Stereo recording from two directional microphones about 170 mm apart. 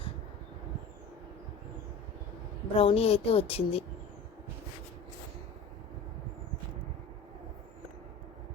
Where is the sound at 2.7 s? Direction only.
35° left (ahead or behind).